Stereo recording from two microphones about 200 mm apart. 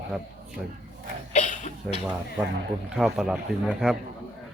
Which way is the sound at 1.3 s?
35° left (ahead or behind).